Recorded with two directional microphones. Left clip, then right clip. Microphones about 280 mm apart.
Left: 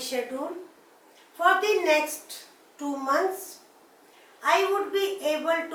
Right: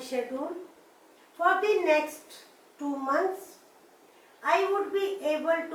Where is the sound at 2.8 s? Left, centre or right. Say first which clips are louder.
Left 2 dB; centre.